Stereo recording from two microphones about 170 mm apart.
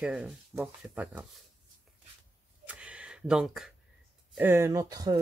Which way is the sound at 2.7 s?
5° right (ahead or behind).